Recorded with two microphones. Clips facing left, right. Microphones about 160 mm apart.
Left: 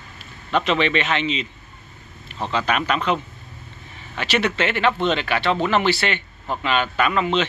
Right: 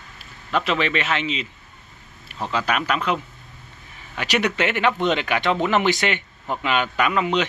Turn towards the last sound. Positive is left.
turn(degrees=-10)  # may be behind; listen again after turning